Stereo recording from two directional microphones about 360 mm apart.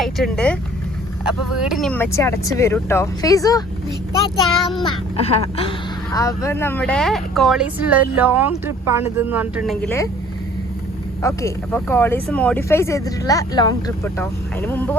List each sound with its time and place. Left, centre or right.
0.0 s speech: centre
5.1 s speech: centre
11.2 s speech: centre